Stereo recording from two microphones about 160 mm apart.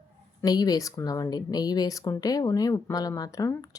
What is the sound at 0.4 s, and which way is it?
Speech, 25° left (ahead or behind).